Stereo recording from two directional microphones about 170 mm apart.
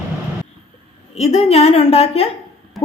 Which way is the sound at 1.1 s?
40° left (ahead or behind).